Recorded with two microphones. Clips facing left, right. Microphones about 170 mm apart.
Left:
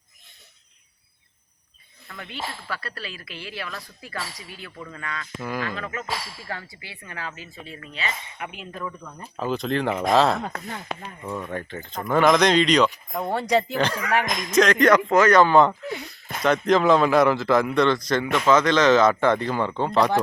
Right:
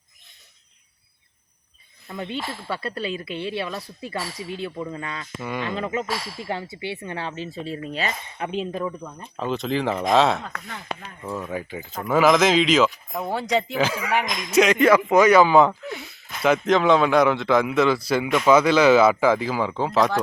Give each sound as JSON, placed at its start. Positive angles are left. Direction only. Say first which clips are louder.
{"t": 2.0, "sound": "speech", "louder": "right 5 dB", "side_deg": -25}
{"t": 5.4, "sound": "speech", "louder": "even", "side_deg": 0}
{"t": 5.6, "sound": "speech", "louder": "right 5 dB", "side_deg": -25}
{"t": 8.4, "sound": "speech", "louder": "right 9 dB", "side_deg": -25}
{"t": 9.2, "sound": "speech", "louder": "even", "side_deg": 0}